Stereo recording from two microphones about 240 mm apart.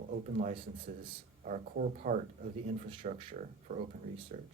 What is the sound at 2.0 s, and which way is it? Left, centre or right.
Speech, right.